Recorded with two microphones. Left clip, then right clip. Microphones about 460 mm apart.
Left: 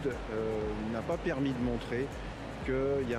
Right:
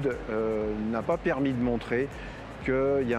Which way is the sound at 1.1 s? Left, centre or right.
Right.